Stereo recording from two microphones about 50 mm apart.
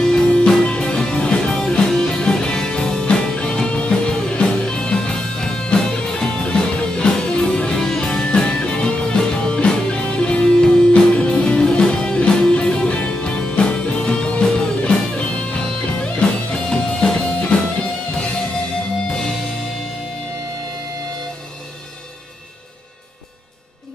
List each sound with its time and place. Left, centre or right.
0.0 s music: centre
19.0 s music: centre